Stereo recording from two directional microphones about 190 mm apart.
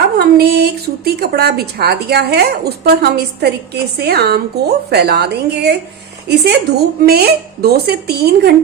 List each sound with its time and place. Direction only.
0.2 s a woman's voice: 55° right (ahead or behind)